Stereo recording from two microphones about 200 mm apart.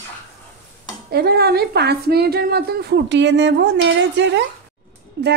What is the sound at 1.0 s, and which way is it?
A woman's voice, 50° right (ahead or behind).